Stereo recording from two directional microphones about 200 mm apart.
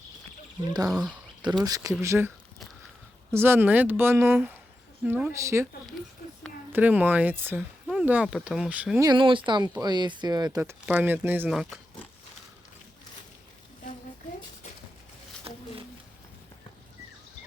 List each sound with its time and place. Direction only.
0.7 s speech: 20° right (ahead or behind)
3.3 s speech: 10° right (ahead or behind)
6.7 s speech: 10° right (ahead or behind)
9.0 s speech: 25° right (ahead or behind); by 11.8 s 5° right (ahead or behind)
15.5 s a sound: 30° right (ahead or behind)